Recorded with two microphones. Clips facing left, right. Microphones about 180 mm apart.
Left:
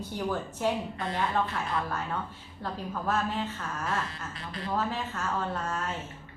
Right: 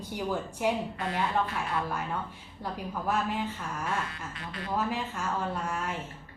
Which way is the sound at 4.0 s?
35° left (ahead or behind).